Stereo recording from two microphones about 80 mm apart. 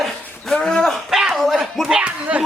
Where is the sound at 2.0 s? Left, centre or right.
Centre.